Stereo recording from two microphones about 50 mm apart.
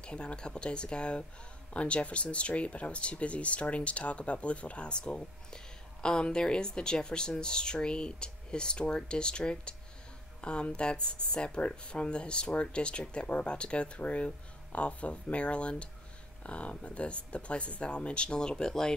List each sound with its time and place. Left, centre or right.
0.0 s speech: centre